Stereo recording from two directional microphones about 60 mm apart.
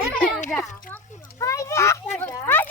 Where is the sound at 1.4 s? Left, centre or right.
Left.